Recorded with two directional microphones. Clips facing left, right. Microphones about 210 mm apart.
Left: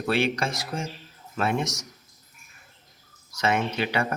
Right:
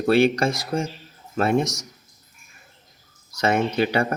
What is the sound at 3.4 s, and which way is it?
Speech, 40° right (ahead or behind).